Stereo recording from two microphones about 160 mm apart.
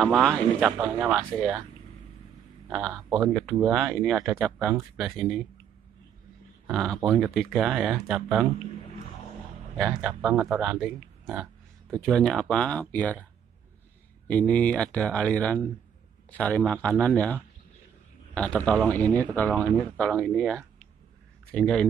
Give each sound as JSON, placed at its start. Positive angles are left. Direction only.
{"t": 0.0, "sound": "speech", "side_deg": 0}
{"t": 2.7, "sound": "speech", "side_deg": 0}
{"t": 6.7, "sound": "speech", "side_deg": 0}
{"t": 9.8, "sound": "speech", "side_deg": -15}
{"t": 11.9, "sound": "speech", "side_deg": 5}
{"t": 14.2, "sound": "speech", "side_deg": 10}
{"t": 18.9, "sound": "speech", "side_deg": 10}